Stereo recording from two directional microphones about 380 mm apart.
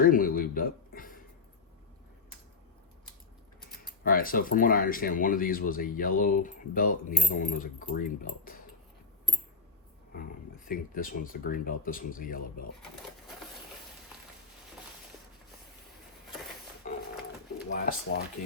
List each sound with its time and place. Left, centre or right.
0.0 s a sound: left
4.0 s speech: left
10.7 s speech: left
17.7 s speech: left